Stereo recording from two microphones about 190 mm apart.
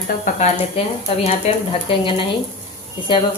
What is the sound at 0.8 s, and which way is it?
Speech, 30° left (ahead or behind).